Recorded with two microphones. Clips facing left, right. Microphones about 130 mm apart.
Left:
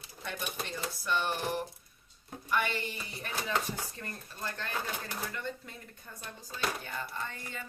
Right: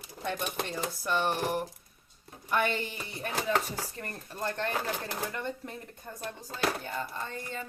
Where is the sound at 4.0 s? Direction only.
50° right (ahead or behind).